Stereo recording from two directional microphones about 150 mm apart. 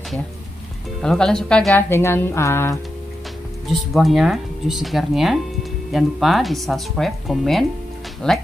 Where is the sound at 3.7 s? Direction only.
Centre (ahead or behind).